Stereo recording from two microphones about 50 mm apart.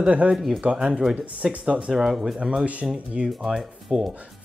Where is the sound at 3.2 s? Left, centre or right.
Centre.